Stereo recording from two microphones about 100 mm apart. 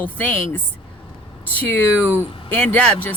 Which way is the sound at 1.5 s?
20° left (ahead or behind).